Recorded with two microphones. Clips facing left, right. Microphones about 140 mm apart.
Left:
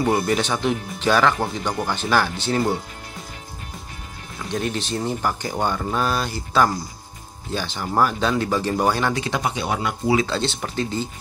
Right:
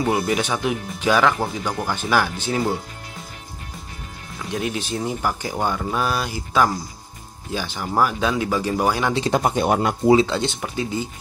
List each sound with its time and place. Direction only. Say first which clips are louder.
0.0 s speech: left 1 dB; 5° right (ahead or behind)
4.5 s speech: even; 10° right (ahead or behind)
9.3 s speech: right 5 dB; 45° right (ahead or behind)
10.1 s speech: right 3 dB; 15° right (ahead or behind)